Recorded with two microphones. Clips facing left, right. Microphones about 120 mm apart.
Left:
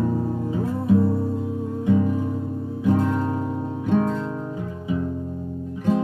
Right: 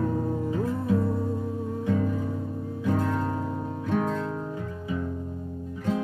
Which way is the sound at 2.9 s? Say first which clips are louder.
Left 5 dB; 15° left (ahead or behind).